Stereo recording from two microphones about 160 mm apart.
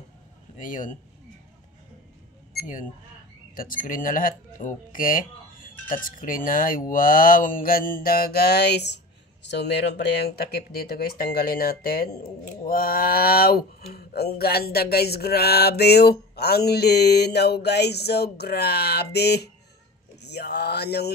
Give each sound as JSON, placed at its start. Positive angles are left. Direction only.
{"t": 0.6, "sound": "speech", "side_deg": 55}
{"t": 2.6, "sound": "speech", "side_deg": 55}
{"t": 20.2, "sound": "a sound", "side_deg": 90}